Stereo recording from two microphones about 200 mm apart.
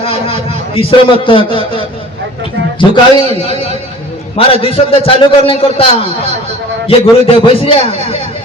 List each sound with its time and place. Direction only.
0.0 s a man's voice: 30° left (ahead or behind)
4.4 s a man's voice: 30° left (ahead or behind)